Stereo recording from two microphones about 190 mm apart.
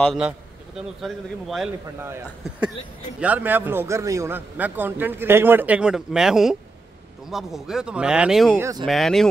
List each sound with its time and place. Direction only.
0.0 s speech: centre (ahead or behind)
2.0 s a man's voice: 15° right (ahead or behind)
8.5 s a man's voice: 15° right (ahead or behind)
8.8 s speech: centre (ahead or behind)